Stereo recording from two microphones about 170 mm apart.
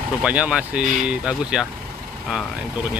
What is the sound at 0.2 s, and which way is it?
Speech, 5° right (ahead or behind).